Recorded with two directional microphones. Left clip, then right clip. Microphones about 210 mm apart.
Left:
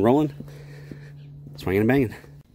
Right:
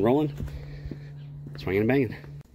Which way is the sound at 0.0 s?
40° left (ahead or behind).